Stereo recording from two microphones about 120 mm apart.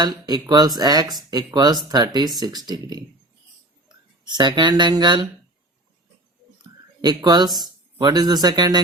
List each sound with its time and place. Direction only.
0.0 s speech: 35° right (ahead or behind)
7.0 s speech: 35° right (ahead or behind)